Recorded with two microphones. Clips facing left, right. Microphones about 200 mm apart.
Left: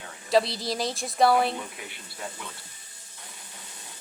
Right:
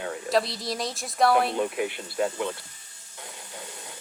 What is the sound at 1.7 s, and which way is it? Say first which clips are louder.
Speech: right 14 dB; 70° right (ahead or behind).